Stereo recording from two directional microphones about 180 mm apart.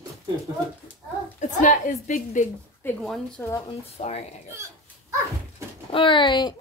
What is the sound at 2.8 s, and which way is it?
Speech, 10° left (ahead or behind).